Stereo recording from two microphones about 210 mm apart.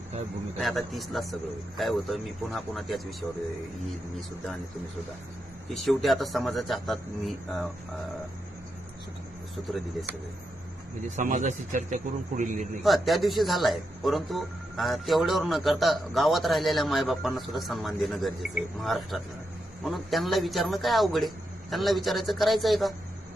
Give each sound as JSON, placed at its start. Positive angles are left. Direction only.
{"t": 0.6, "sound": "speech", "side_deg": 0}
{"t": 5.7, "sound": "speech", "side_deg": 0}
{"t": 11.2, "sound": "a man's voice", "side_deg": -35}
{"t": 12.8, "sound": "speech", "side_deg": 0}